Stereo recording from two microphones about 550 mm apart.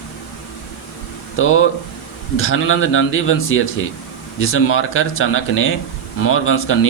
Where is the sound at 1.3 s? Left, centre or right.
Left.